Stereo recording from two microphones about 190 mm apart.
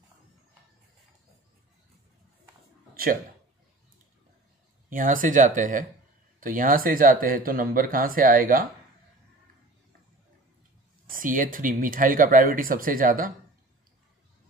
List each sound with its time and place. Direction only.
2.9 s a sound: 50° right (ahead or behind)
4.8 s speech: 45° right (ahead or behind)
11.1 s speech: 45° right (ahead or behind)